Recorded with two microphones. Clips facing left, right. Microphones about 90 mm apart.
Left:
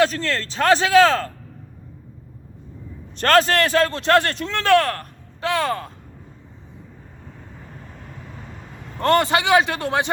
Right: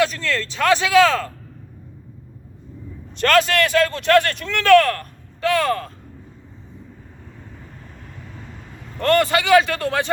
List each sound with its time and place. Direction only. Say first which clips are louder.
0.0 s speech: left 1 dB; 35° left (ahead or behind)
3.2 s a man's voice: even; 35° left (ahead or behind)
9.0 s a man's voice: even; 20° left (ahead or behind)